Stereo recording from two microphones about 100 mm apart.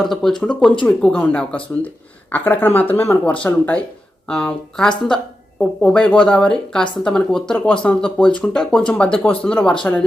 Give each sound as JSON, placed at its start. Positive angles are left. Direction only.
{"t": 0.0, "sound": "speech", "side_deg": 5}
{"t": 3.2, "sound": "speech", "side_deg": 15}